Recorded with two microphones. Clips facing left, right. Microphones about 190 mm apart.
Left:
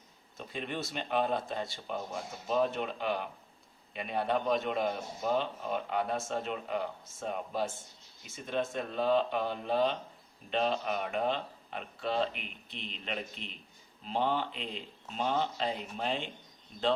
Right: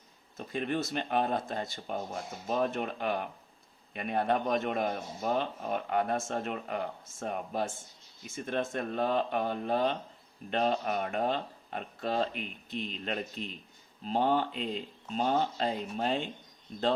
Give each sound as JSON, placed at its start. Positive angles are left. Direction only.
{"t": 0.3, "sound": "a man's voice", "side_deg": -45}